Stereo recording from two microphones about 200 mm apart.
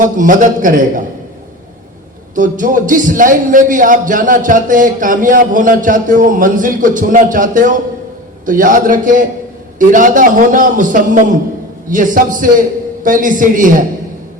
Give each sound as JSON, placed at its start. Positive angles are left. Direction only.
{"t": 0.0, "sound": "a man's voice", "side_deg": -40}
{"t": 2.3, "sound": "a man's voice", "side_deg": -40}